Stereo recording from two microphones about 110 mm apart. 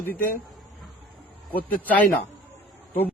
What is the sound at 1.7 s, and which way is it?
Speech, 15° left (ahead or behind).